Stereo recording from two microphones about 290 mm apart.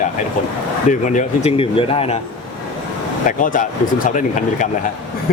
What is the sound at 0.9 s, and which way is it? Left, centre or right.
Speech, left.